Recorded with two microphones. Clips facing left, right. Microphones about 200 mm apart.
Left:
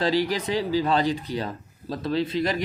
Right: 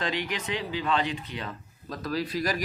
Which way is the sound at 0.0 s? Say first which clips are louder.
Left 8 dB; 35° left (ahead or behind).